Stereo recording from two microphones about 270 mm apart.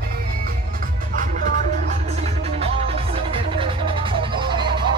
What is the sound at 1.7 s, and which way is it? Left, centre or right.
Music, right.